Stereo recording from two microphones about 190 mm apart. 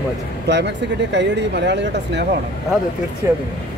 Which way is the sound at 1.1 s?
65° right (ahead or behind).